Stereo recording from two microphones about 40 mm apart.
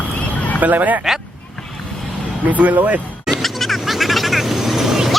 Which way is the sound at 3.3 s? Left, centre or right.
Centre.